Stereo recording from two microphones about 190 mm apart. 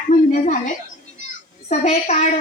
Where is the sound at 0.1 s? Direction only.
40° left (ahead or behind).